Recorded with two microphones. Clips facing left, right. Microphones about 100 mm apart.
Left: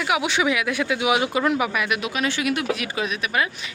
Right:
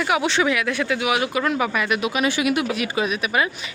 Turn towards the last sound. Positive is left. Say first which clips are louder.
# right 2 dB
turn(degrees=-5)  # may be behind; listen again after turning